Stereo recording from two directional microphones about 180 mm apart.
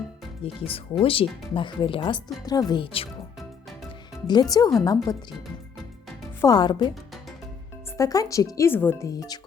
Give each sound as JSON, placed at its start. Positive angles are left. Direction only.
{"t": 0.4, "sound": "speech", "side_deg": 30}
{"t": 4.3, "sound": "speech", "side_deg": 20}
{"t": 6.4, "sound": "speech", "side_deg": 20}
{"t": 7.9, "sound": "speech", "side_deg": 20}